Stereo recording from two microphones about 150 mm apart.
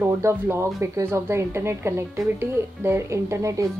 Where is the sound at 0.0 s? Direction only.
15° right (ahead or behind).